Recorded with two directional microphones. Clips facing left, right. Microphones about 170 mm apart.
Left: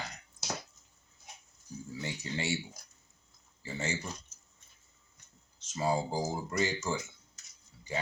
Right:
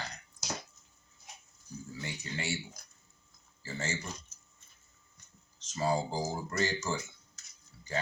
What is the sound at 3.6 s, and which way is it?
Speech, 15° left (ahead or behind).